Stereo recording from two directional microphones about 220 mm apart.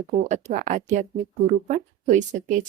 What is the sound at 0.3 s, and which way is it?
Speech, 35° right (ahead or behind).